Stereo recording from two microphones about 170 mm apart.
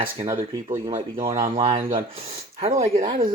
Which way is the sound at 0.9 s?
50° right (ahead or behind).